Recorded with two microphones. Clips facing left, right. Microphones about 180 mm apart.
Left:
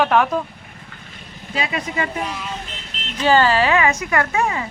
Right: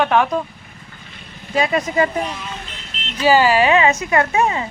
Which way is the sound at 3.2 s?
10° right (ahead or behind).